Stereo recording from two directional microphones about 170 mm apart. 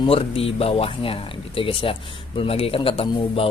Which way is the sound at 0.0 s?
35° left (ahead or behind).